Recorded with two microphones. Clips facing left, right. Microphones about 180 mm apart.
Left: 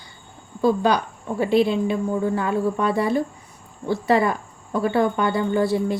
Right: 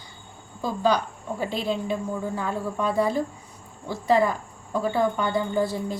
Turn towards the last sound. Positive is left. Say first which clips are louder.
# left 5 dB
turn(degrees=70)  # may be behind; listen again after turning